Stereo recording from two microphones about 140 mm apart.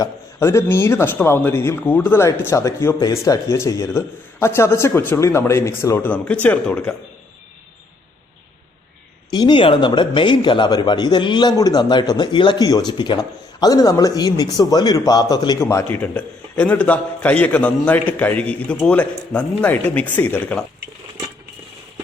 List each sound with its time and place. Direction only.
0.0 s speech: 20° left (ahead or behind)
6.1 s speech: 10° left (ahead or behind)
9.3 s speech: 35° left (ahead or behind); by 20.6 s 15° left (ahead or behind)